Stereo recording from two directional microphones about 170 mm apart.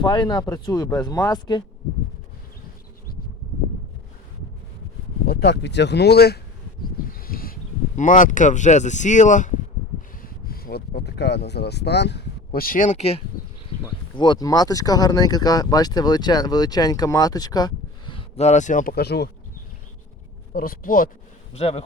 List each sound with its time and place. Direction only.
0.0 s speech: 25° left (ahead or behind)
5.2 s speech: 80° left
7.1 s speech: 60° left (ahead or behind)
10.4 s speech: 60° left (ahead or behind); by 13.2 s 35° left (ahead or behind)
14.2 s speech: 25° left (ahead or behind); by 19.3 s 75° left (ahead or behind)
20.5 s speech: 60° left (ahead or behind)
21.5 s speech: 35° left (ahead or behind)